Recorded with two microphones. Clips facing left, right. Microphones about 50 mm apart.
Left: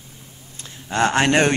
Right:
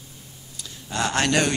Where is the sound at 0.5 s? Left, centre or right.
Left.